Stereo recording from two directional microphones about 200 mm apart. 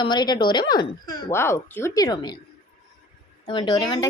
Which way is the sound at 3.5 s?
25° left (ahead or behind).